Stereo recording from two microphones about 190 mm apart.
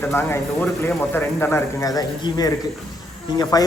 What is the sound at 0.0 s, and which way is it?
Speech, 10° left (ahead or behind).